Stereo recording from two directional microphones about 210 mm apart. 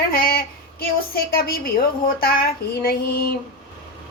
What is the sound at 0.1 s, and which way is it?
Female singing, 45° left (ahead or behind).